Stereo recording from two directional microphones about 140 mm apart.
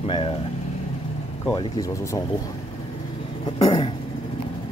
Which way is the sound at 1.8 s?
25° left (ahead or behind).